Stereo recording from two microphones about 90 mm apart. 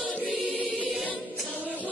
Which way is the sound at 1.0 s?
15° left (ahead or behind).